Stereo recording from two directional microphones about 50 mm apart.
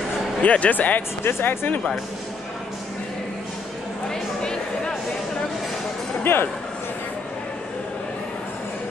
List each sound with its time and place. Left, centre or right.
0.4 s speech: left
1.2 s speech: left
4.1 s a sound: centre
6.2 s speech: left